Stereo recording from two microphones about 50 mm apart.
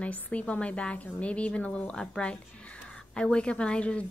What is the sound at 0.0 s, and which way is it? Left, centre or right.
A woman's voice, left.